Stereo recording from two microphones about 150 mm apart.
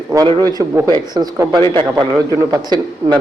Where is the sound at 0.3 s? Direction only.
30° right (ahead or behind).